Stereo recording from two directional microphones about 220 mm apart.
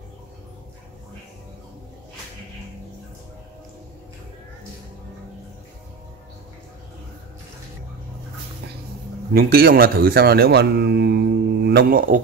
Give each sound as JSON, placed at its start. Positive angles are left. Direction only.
{"t": 9.3, "sound": "a man's voice", "side_deg": -45}